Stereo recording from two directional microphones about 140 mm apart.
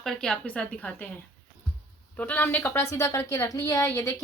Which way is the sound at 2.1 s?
10° left (ahead or behind).